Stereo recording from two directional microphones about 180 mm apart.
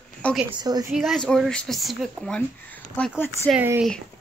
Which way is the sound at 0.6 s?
20° right (ahead or behind).